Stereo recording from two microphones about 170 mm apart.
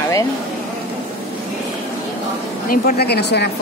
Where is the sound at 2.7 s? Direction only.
60° left (ahead or behind).